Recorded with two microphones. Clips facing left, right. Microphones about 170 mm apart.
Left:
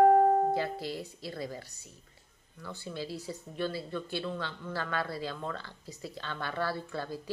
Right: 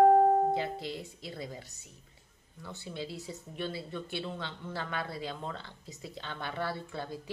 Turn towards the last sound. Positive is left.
turn(degrees=-20)  # may be behind; listen again after turning